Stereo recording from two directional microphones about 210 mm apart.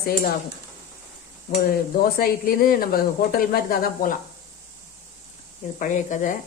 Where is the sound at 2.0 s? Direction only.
45° left (ahead or behind).